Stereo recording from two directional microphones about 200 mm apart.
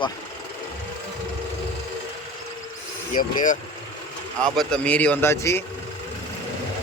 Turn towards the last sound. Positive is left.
turn(degrees=10)  # may be behind; listen again after turning